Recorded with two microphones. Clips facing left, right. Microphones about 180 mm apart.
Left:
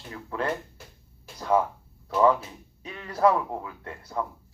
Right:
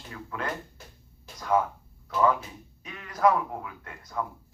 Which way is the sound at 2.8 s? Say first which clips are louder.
Left 1 dB; 30° left (ahead or behind).